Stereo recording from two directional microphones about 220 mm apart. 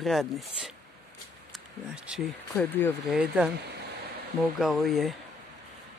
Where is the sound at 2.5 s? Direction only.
5° left (ahead or behind).